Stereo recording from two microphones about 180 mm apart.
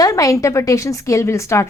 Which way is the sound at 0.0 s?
20° left (ahead or behind).